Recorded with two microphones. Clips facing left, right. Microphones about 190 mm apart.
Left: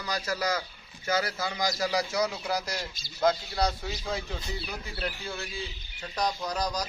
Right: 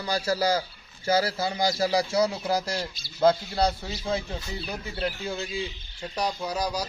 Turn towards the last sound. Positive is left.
turn(degrees=-10)  # may be behind; listen again after turning